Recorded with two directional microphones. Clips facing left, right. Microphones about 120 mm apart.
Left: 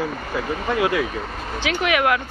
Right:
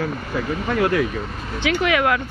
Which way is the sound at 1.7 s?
20° left (ahead or behind).